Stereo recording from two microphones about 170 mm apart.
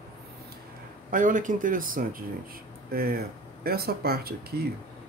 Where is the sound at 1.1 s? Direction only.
50° right (ahead or behind).